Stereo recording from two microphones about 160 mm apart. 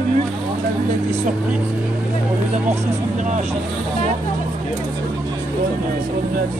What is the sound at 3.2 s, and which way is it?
Speech, 50° right (ahead or behind).